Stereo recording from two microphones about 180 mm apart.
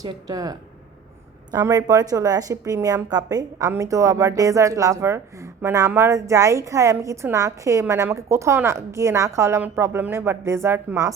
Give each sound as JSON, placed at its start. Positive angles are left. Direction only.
{"t": 0.0, "sound": "a woman's voice", "side_deg": -20}
{"t": 1.5, "sound": "a woman's voice", "side_deg": -20}